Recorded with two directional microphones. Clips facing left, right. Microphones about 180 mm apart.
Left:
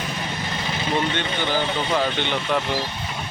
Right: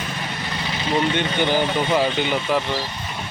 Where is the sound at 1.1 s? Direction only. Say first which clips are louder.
Right 4 dB; 15° right (ahead or behind).